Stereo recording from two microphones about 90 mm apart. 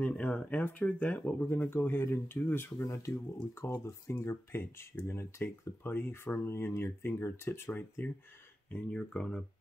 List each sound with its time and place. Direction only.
0.0 s speech: 15° left (ahead or behind)
8.6 s speech: 15° left (ahead or behind)